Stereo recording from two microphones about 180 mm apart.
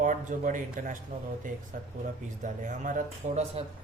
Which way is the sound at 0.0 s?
45° right (ahead or behind).